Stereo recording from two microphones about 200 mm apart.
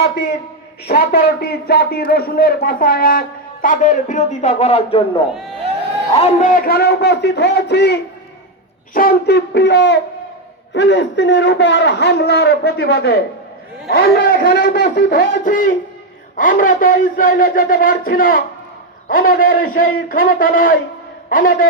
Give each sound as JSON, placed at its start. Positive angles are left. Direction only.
{"t": 0.9, "sound": "a man's voice", "side_deg": 50}
{"t": 15.4, "sound": "a man's voice", "side_deg": 40}